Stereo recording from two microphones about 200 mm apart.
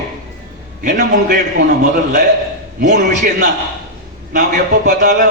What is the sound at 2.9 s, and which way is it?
Speech, 40° right (ahead or behind).